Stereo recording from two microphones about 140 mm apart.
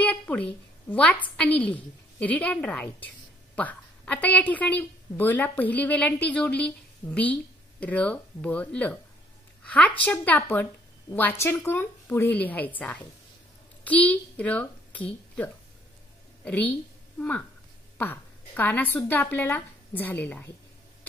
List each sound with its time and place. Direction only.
0.0 s a sound: 10° left (ahead or behind)
1.3 s a woman's voice: 10° left (ahead or behind)
17.9 s a woman's voice: 15° left (ahead or behind)